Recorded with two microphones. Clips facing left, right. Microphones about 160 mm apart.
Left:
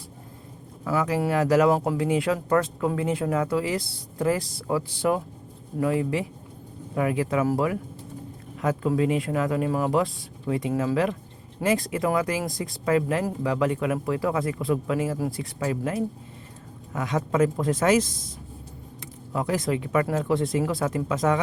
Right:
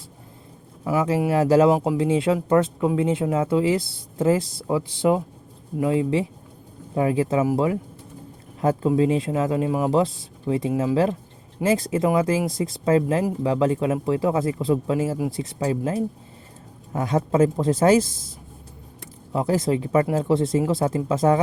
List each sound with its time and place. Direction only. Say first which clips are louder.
0.9 s speech: right 3 dB; 20° right (ahead or behind)
1.7 s speech: right 3 dB; 15° right (ahead or behind)
2.0 s speech: right 3 dB; 25° right (ahead or behind)
8.9 s speech: right 2 dB; 25° right (ahead or behind)
19.3 s speech: right 4 dB; 30° right (ahead or behind)